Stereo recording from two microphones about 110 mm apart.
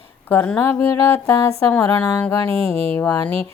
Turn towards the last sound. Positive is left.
turn(degrees=20)  # may be behind; listen again after turning